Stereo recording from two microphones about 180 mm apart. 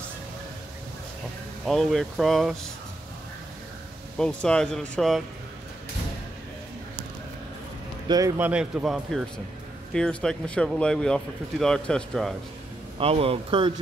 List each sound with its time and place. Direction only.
1.7 s speech: centre (ahead or behind)
4.2 s speech: 5° left (ahead or behind)
8.4 s speech: 10° right (ahead or behind)
12.9 s speech: 30° right (ahead or behind)